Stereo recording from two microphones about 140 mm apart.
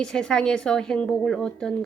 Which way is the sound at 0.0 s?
5° left (ahead or behind).